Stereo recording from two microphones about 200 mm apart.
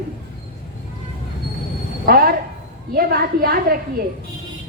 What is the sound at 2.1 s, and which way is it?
A woman's voice, 50° right (ahead or behind).